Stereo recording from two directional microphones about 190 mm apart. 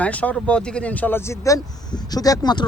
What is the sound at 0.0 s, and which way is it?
Speech, 5° left (ahead or behind).